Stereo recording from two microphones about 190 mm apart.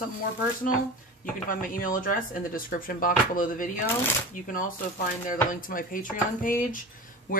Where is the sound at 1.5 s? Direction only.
45° left (ahead or behind).